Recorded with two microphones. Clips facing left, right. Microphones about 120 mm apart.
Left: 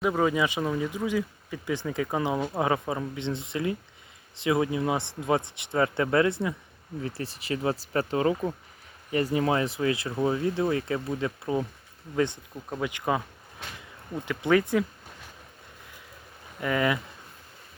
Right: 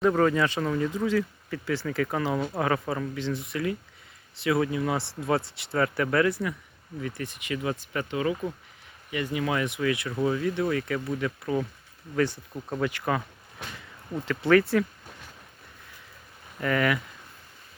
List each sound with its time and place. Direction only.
0.0 s speech: 10° left (ahead or behind)
14.3 s speech: 15° left (ahead or behind)
16.6 s speech: 15° left (ahead or behind)